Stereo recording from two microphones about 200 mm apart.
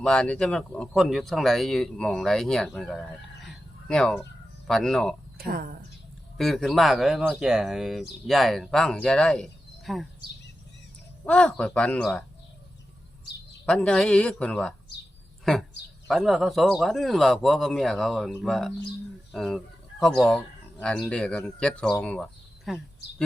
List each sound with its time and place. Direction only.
0.0 s speech: 5° left (ahead or behind)
3.4 s a sound: 5° left (ahead or behind)
4.6 s speech: centre (ahead or behind)
5.5 s speech: 45° right (ahead or behind)
6.3 s speech: centre (ahead or behind)
11.3 s speech: 5° left (ahead or behind)
13.7 s speech: 5° left (ahead or behind)
16.0 s speech: centre (ahead or behind)